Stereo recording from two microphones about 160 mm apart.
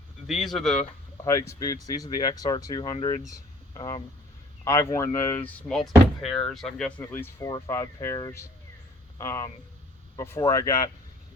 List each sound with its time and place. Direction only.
0.3 s speech: centre (ahead or behind)
1.2 s speech: 20° left (ahead or behind)
4.6 s speech: 15° left (ahead or behind)